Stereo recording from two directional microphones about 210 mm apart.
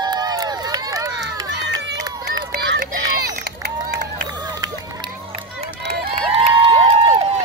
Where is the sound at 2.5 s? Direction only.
55° right (ahead or behind).